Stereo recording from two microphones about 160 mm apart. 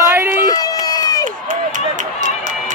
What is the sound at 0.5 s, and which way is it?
Run, 25° left (ahead or behind).